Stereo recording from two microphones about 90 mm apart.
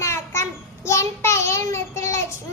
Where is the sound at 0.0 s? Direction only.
30° left (ahead or behind).